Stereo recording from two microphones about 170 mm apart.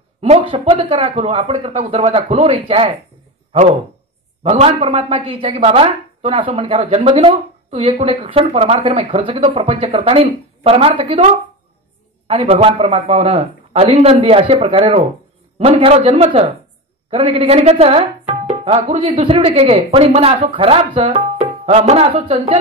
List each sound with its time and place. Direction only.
0.2 s speech: 35° right (ahead or behind)
4.4 s speech: 40° right (ahead or behind)
12.3 s speech: 35° right (ahead or behind)
21.0 s music: 35° right (ahead or behind)